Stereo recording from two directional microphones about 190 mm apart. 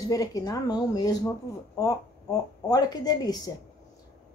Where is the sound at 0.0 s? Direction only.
20° left (ahead or behind).